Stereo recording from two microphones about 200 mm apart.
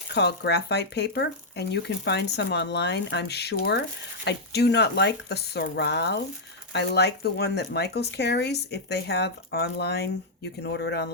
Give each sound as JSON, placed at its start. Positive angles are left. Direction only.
{"t": 0.1, "sound": "speech", "side_deg": 55}